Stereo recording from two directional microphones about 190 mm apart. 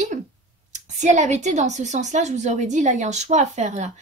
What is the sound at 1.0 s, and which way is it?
A woman's voice, 40° right (ahead or behind).